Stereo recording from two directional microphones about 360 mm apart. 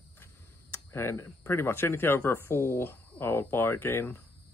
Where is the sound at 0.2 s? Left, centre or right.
Centre.